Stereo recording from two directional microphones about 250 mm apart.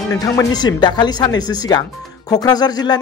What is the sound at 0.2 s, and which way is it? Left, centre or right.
Speech, centre.